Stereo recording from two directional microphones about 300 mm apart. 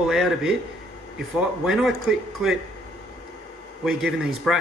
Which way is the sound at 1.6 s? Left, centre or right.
Centre.